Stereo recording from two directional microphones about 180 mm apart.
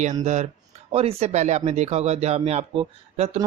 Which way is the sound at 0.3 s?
40° right (ahead or behind).